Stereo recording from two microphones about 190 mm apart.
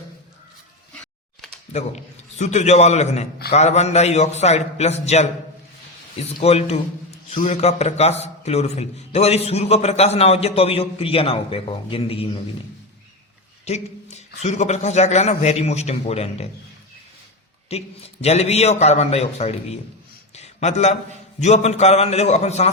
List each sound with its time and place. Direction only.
2.4 s a man's voice: 35° left (ahead or behind)
6.4 s a man's voice: 35° left (ahead or behind)
13.7 s a man's voice: 35° left (ahead or behind)
17.7 s a man's voice: 35° left (ahead or behind)